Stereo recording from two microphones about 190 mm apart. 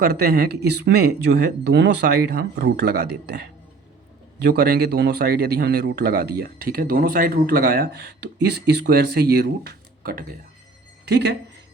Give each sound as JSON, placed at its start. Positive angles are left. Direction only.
{"t": 0.0, "sound": "a man's voice", "side_deg": -55}